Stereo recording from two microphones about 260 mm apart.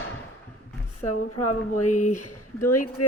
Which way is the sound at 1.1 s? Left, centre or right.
Left.